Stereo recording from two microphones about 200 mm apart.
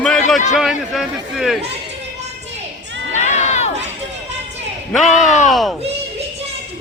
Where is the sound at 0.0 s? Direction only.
5° left (ahead or behind).